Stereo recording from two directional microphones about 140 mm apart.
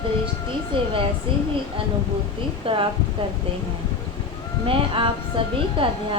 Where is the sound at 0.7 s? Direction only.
40° right (ahead or behind).